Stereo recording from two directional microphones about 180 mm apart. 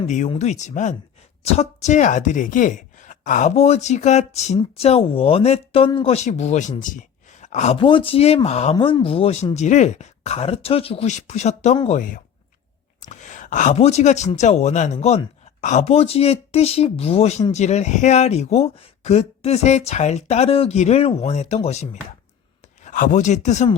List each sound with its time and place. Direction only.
0.3 s speech: 40° left (ahead or behind)